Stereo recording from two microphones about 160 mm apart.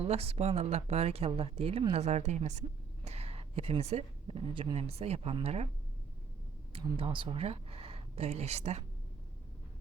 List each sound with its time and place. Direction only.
0.0 s speech: 40° right (ahead or behind)
6.7 s speech: 35° right (ahead or behind)